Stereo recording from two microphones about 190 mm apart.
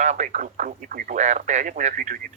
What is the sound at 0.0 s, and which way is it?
Speech, 40° right (ahead or behind).